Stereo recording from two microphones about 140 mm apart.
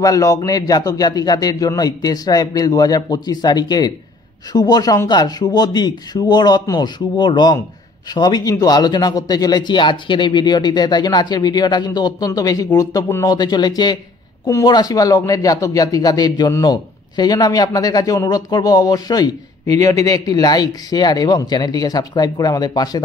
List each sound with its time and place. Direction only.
0.0 s speech: 25° left (ahead or behind)